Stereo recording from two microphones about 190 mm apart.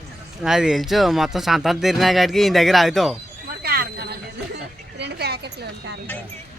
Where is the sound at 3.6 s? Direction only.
55° right (ahead or behind).